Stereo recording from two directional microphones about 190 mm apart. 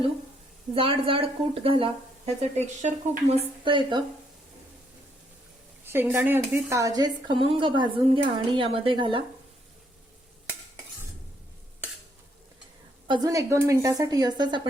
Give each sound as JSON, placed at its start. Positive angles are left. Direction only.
{"t": 0.7, "sound": "speech", "side_deg": -30}
{"t": 5.8, "sound": "speech", "side_deg": -10}
{"t": 13.1, "sound": "speech", "side_deg": -20}